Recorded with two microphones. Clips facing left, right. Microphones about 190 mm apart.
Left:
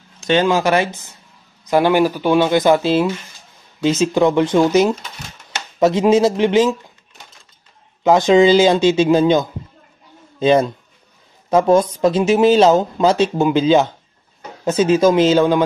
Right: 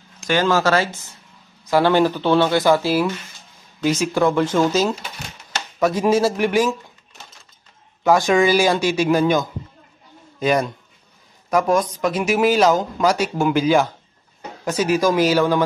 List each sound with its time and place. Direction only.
0.3 s speech: 20° left (ahead or behind)
8.0 s speech: 20° left (ahead or behind)